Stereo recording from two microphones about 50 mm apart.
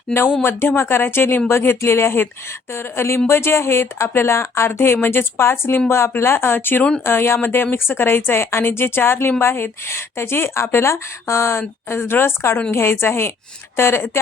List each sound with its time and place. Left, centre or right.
0.4 s a woman's voice: left